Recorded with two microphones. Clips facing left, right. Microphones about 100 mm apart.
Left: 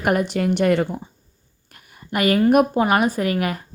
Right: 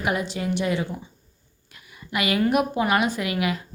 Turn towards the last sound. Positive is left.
turn(degrees=45)  # may be behind; listen again after turning